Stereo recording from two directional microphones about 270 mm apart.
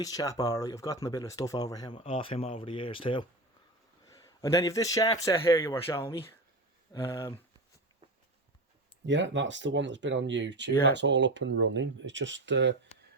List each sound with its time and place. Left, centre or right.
0.0 s speech: centre
9.0 s speech: right